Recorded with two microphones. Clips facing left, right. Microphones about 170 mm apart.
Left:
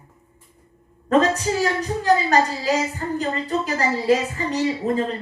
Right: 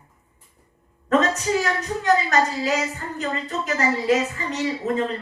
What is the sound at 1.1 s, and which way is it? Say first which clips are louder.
A woman's voice: left 2 dB; 35° left (ahead or behind).